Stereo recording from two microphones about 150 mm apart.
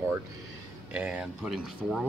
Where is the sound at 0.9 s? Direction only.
5° right (ahead or behind).